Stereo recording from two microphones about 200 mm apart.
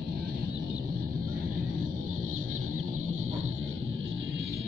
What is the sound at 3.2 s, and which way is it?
Music, 90° right.